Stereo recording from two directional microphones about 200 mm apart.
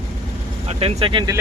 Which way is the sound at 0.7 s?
30° right (ahead or behind).